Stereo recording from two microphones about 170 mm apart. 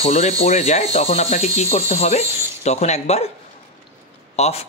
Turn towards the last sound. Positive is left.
turn(degrees=40)  # may be behind; listen again after turning